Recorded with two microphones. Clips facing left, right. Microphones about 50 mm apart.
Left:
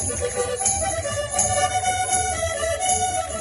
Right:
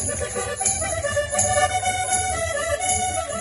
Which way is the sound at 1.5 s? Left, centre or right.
Centre.